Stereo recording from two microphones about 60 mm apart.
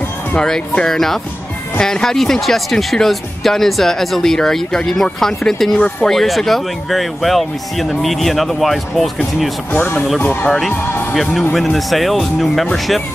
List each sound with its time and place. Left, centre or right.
0.8 s speech: centre
9.7 s speech: left
11.5 s speech: centre